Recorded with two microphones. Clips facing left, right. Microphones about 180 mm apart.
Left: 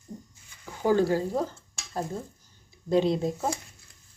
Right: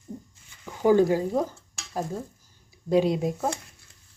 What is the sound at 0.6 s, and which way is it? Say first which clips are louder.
Stir: right 4 dB; 15° right (ahead or behind).